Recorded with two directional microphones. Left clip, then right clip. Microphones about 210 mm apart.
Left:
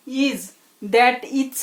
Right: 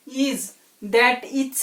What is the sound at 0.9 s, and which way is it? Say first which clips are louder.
Speech: left 2 dB; 45° left (ahead or behind).